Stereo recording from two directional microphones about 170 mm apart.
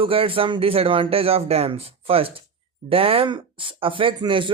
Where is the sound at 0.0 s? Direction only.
35° right (ahead or behind).